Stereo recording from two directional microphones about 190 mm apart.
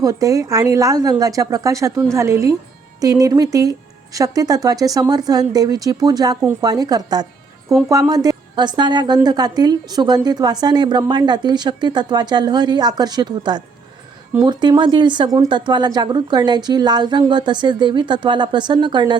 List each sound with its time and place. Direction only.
0.0 s speech: 15° right (ahead or behind)